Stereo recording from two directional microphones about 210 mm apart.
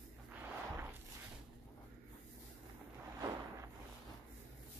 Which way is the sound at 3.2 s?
15° right (ahead or behind).